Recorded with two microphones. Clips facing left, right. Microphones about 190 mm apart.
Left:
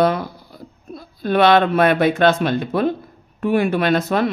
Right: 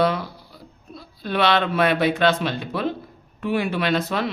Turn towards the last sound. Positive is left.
turn(degrees=50)  # may be behind; listen again after turning